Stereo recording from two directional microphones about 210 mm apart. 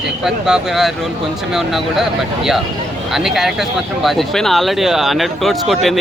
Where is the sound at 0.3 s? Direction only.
5° right (ahead or behind).